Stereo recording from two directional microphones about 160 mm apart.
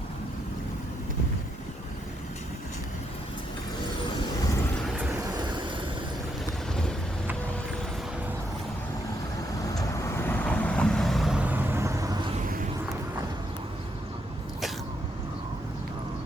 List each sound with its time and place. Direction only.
5.3 s vehicle: 25° right (ahead or behind)
9.7 s vehicle: 15° left (ahead or behind); by 12.3 s 25° right (ahead or behind)